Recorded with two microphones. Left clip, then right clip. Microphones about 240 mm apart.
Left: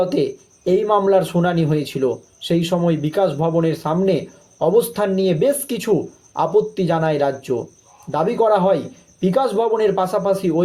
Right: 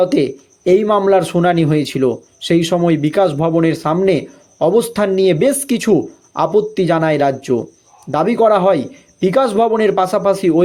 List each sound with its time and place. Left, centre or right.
0.0 s speech: right